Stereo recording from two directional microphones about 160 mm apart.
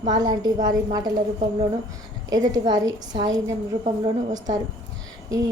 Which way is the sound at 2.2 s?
25° right (ahead or behind).